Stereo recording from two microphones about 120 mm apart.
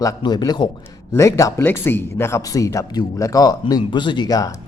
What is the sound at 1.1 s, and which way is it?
Speech, 25° left (ahead or behind).